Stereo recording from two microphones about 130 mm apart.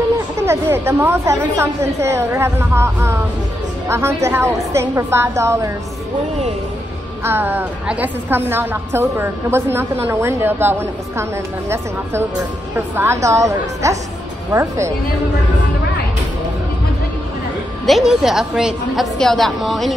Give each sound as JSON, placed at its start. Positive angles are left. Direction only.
{"t": 0.4, "sound": "a woman's voice", "side_deg": -20}
{"t": 7.2, "sound": "a woman's voice", "side_deg": -15}
{"t": 17.8, "sound": "a woman's voice", "side_deg": 0}